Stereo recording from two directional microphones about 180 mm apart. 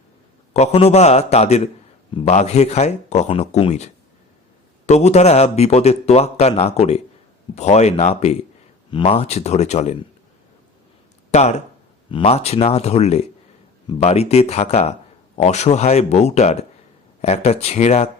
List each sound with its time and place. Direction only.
0.5 s a man's voice: 35° left (ahead or behind)
4.9 s a man's voice: 40° left (ahead or behind)
11.3 s a man's voice: 40° left (ahead or behind)